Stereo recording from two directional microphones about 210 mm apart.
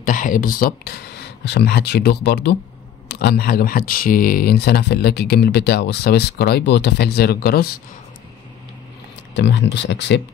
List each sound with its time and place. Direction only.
0.0 s speech: 40° left (ahead or behind)
9.3 s speech: 60° left (ahead or behind)